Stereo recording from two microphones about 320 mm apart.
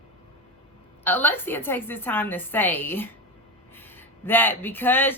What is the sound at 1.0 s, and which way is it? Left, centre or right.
A woman's voice, centre.